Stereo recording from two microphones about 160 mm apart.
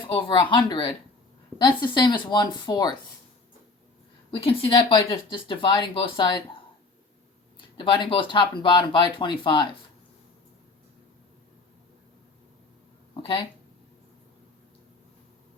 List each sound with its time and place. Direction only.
0.1 s speech: 30° left (ahead or behind)
4.3 s speech: 35° left (ahead or behind)
7.8 s speech: 30° left (ahead or behind)